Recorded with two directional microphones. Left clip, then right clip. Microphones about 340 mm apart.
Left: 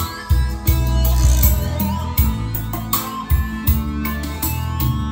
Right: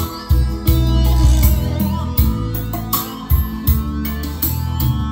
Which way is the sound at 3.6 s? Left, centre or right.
Centre.